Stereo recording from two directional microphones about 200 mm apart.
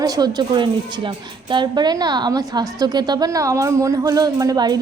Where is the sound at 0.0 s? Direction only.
20° right (ahead or behind).